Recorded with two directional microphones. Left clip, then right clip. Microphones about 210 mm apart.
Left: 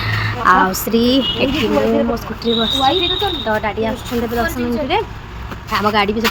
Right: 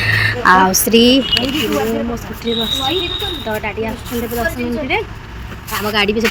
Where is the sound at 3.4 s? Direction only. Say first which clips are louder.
Left 3 dB; 5° left (ahead or behind).